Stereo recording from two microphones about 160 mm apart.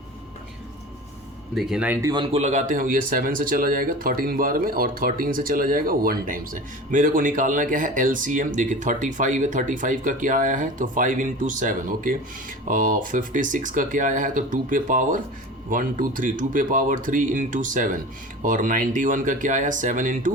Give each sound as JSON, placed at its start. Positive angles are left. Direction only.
{"t": 1.5, "sound": "speech", "side_deg": -5}
{"t": 2.0, "sound": "speech", "side_deg": -25}
{"t": 2.4, "sound": "speech", "side_deg": -50}